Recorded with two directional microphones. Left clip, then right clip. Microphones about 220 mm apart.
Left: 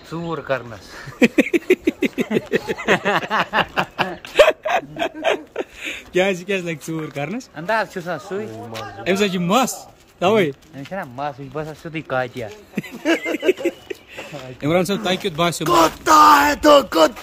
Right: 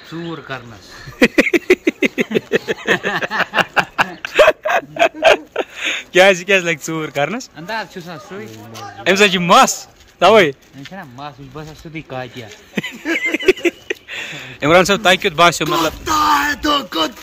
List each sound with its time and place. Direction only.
0.3 s speech: 30° left (ahead or behind)
1.2 s a sound: centre (ahead or behind)
2.3 s a man's voice: 5° left (ahead or behind)
3.5 s a sound: centre (ahead or behind)
7.5 s speech: 20° left (ahead or behind)
9.0 s a man's voice: centre (ahead or behind)
10.9 s speech: 20° left (ahead or behind)
13.0 s a sound: 30° left (ahead or behind)
13.5 s speech: 5° right (ahead or behind)
15.7 s speech: 20° left (ahead or behind)